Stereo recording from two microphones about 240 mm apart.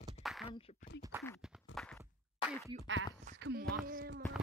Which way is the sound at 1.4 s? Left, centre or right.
Centre.